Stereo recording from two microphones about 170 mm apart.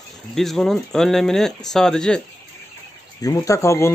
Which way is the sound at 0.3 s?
Centre (ahead or behind).